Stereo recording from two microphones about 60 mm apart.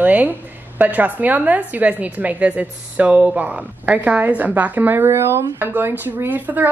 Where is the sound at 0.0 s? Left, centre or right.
Right.